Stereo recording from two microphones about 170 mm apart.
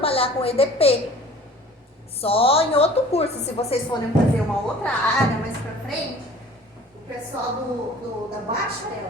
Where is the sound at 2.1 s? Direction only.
35° left (ahead or behind).